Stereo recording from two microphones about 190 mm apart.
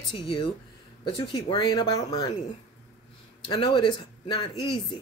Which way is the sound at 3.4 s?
25° left (ahead or behind).